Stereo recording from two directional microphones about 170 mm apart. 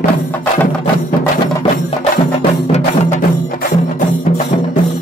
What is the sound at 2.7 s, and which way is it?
Music, 40° left (ahead or behind).